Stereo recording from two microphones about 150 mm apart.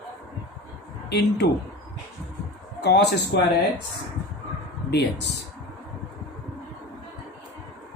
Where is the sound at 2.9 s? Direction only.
90° left.